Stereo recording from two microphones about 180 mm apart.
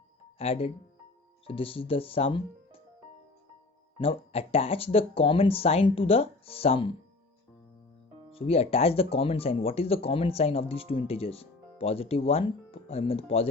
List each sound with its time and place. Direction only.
0.3 s speech: 30° left (ahead or behind)
3.9 s speech: 30° left (ahead or behind)
8.3 s speech: 30° left (ahead or behind)